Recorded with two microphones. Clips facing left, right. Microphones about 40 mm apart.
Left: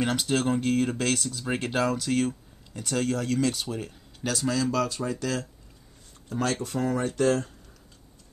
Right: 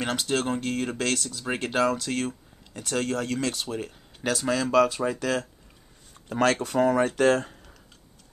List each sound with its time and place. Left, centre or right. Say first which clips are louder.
0.0 s speech: left 1 dB; centre
4.2 s speech: right 1 dB; centre
6.2 s speech: right 5 dB; right
6.8 s speech: right 4 dB; right